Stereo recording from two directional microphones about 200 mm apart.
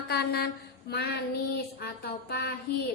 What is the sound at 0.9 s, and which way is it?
Female singing, 55° left (ahead or behind).